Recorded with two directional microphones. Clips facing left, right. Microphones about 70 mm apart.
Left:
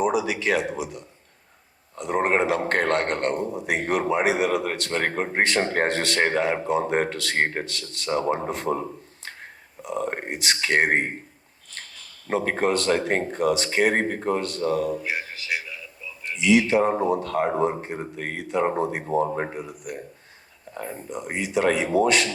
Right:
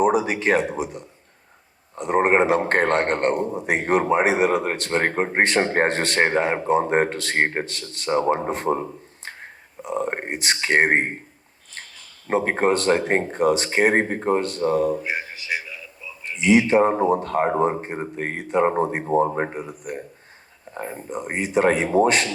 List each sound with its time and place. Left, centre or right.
0.0 s a man's voice: right
9.8 s a man's voice: right
12.3 s a man's voice: right
15.2 s a sound: centre
15.4 s a sound: centre
16.4 s a man's voice: right
21.1 s a man's voice: right